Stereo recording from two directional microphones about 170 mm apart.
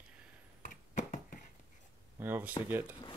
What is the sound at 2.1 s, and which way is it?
Speech, 10° right (ahead or behind).